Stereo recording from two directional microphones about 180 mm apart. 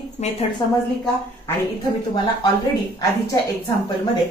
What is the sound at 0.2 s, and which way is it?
Speech, 40° left (ahead or behind).